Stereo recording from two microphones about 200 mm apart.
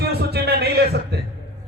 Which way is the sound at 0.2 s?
55° right (ahead or behind).